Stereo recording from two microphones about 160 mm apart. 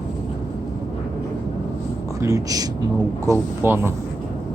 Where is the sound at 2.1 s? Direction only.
20° right (ahead or behind).